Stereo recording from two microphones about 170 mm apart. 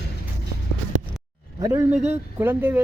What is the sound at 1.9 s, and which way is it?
Speech, 10° right (ahead or behind).